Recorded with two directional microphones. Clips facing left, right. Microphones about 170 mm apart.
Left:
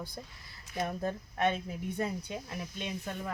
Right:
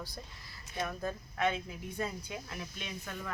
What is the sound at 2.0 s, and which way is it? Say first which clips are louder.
Speech: left 3 dB; 20° left (ahead or behind).